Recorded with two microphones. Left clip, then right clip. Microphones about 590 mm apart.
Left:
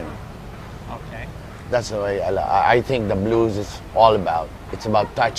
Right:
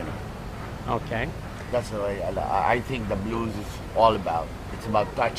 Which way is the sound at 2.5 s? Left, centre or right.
Left.